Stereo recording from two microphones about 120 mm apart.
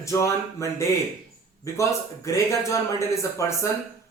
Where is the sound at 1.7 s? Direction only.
25° left (ahead or behind).